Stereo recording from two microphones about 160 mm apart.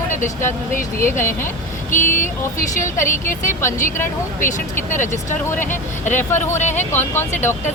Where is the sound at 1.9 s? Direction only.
55° left (ahead or behind).